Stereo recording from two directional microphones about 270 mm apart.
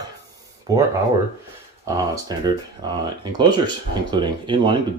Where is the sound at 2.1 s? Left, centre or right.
Centre.